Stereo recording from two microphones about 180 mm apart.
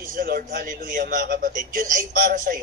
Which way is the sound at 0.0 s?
50° right (ahead or behind).